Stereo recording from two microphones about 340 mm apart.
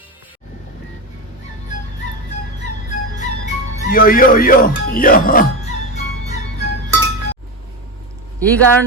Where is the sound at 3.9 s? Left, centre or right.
Left.